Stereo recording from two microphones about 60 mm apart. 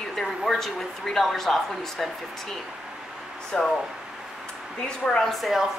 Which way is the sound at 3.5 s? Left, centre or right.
Centre.